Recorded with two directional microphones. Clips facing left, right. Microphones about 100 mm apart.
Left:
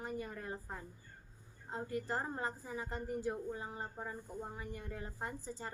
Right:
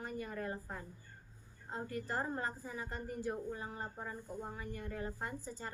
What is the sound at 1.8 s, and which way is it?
A woman's voice, 20° left (ahead or behind).